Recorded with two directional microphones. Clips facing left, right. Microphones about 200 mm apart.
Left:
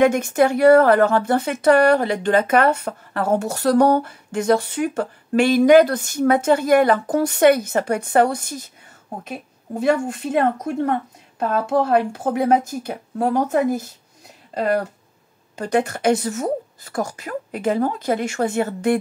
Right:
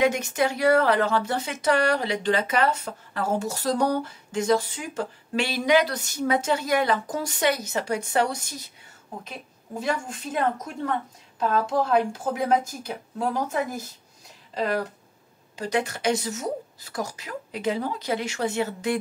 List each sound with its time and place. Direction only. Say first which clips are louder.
0.0 s speech: left 7 dB; 50° left (ahead or behind)
9.8 s speech: left 9 dB; 60° left (ahead or behind)